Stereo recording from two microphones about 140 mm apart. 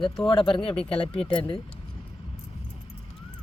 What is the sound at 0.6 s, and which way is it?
Speech, 40° left (ahead or behind).